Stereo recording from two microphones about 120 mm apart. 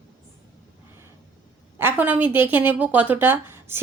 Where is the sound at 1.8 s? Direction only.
15° right (ahead or behind).